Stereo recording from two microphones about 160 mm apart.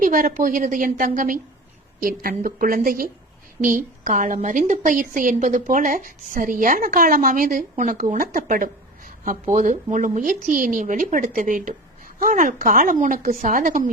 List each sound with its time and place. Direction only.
0.0 s speech: 60° right (ahead or behind)